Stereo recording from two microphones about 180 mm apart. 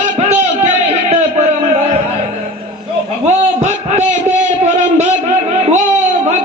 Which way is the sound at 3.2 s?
40° right (ahead or behind).